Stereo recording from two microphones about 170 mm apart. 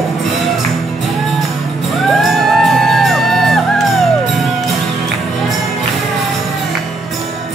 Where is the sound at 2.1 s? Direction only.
Centre (ahead or behind).